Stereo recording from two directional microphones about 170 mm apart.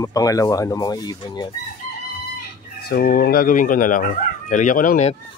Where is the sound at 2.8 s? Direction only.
65° left (ahead or behind).